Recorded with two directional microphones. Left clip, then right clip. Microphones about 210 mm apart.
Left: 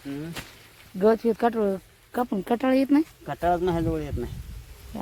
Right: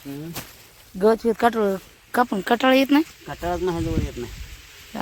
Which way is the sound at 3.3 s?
20° left (ahead or behind).